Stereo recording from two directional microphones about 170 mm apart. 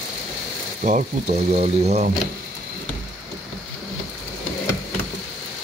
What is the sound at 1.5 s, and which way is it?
Speech, 40° right (ahead or behind).